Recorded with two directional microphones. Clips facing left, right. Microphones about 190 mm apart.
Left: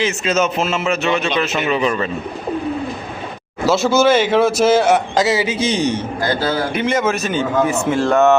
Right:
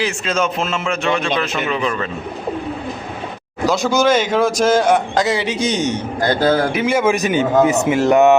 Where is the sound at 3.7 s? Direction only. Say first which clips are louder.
Left 2 dB; 5° left (ahead or behind).